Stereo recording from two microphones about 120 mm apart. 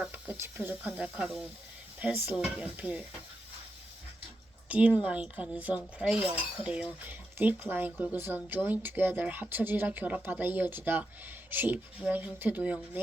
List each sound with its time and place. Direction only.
0.0 s a sound: 10° right (ahead or behind)
0.3 s speech: 20° right (ahead or behind)
4.7 s a woman's voice: 10° right (ahead or behind)